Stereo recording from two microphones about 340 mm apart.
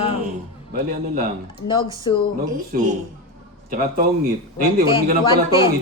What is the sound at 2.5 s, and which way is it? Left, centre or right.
Speech, right.